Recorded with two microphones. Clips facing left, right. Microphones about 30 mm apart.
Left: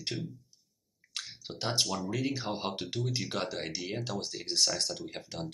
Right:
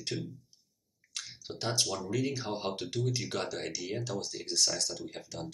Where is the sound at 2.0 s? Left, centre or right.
Centre.